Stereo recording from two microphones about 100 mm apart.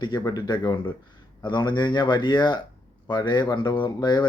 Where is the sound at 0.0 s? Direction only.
45° left (ahead or behind).